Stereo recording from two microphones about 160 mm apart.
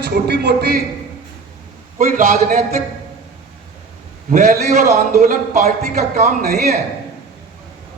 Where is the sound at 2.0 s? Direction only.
55° right (ahead or behind).